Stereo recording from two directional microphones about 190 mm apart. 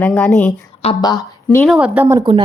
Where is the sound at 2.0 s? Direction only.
15° right (ahead or behind).